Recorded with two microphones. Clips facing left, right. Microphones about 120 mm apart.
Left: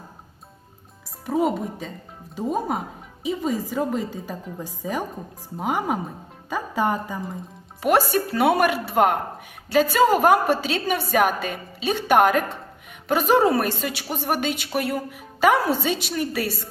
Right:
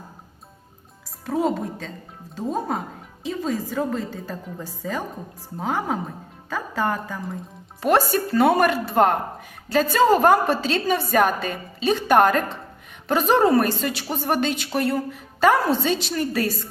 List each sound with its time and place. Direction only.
1.2 s a woman's voice: 5° left (ahead or behind)